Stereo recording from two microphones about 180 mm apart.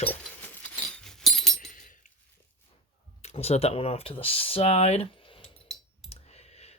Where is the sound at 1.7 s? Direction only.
50° left (ahead or behind).